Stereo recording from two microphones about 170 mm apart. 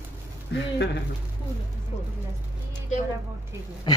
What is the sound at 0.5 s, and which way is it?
Speech, 90° left.